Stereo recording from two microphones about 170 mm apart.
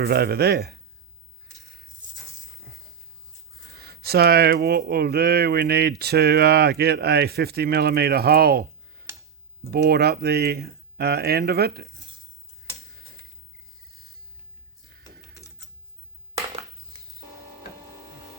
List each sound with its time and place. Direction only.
0.0 s speech: 65° right (ahead or behind)
2.7 s a sound: 70° right (ahead or behind)
3.8 s speech: 70° right (ahead or behind)